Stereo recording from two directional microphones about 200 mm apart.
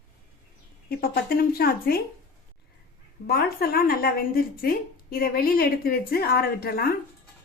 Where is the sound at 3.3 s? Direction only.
50° left (ahead or behind).